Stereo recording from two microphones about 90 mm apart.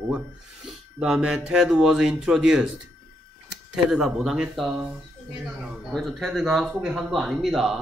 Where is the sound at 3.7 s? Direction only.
5° right (ahead or behind).